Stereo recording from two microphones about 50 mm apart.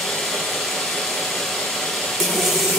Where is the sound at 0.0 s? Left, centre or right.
Centre.